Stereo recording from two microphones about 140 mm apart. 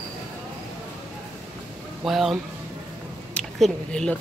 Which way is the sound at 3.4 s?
5° left (ahead or behind).